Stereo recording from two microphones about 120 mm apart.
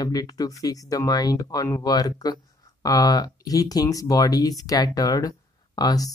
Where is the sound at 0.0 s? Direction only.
35° left (ahead or behind).